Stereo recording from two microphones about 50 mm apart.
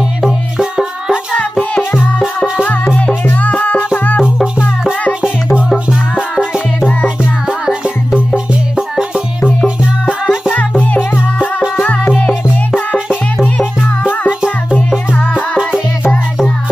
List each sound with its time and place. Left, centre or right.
0.6 s music: centre
3.3 s music: left
7.4 s music: centre
10.2 s music: centre
12.4 s music: centre
15.3 s music: centre